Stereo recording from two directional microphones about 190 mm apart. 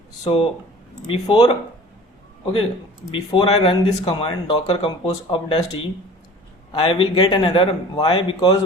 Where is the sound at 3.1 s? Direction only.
30° left (ahead or behind).